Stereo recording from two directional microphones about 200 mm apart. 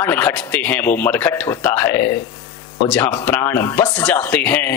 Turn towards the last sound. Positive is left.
turn(degrees=10)  # may be behind; listen again after turning